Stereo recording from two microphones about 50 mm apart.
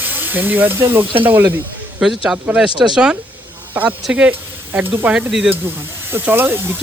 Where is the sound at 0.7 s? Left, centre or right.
Right.